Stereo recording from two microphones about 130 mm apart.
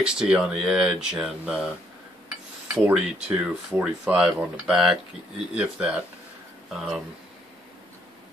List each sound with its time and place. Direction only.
0.0 s speech: 5° right (ahead or behind)
2.7 s speech: 10° right (ahead or behind)